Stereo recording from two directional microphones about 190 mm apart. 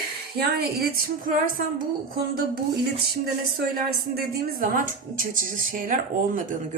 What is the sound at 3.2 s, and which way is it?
A woman's voice, 55° right (ahead or behind).